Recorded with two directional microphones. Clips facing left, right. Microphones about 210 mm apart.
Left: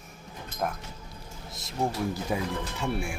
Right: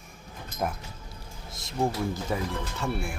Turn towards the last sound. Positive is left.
turn(degrees=10)  # may be behind; listen again after turning